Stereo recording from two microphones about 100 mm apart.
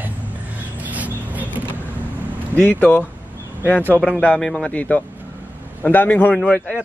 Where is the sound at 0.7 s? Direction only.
15° right (ahead or behind).